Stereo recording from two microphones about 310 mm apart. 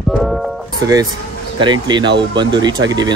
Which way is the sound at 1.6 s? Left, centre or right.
Centre.